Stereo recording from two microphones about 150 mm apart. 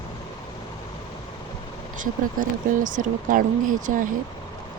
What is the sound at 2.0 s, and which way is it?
Speech, 60° right (ahead or behind).